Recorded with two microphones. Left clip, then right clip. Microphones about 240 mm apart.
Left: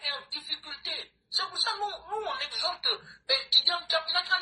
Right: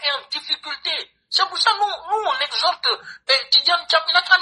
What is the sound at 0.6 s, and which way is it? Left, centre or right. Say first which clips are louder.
Speech: right 11 dB; right.